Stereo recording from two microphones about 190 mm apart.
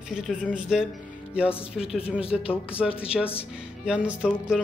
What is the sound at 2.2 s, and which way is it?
Speech, 30° left (ahead or behind).